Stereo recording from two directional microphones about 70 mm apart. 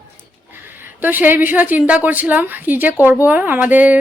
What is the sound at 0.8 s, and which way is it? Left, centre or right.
Speech, right.